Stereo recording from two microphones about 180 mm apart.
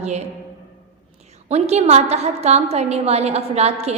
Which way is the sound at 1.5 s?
35° right (ahead or behind).